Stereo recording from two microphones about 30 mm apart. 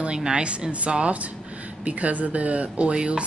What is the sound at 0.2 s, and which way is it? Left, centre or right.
A woman's voice, right.